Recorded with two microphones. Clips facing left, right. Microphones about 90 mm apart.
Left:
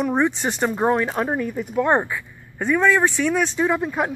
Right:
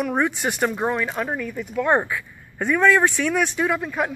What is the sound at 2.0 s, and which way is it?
Speech, 5° left (ahead or behind).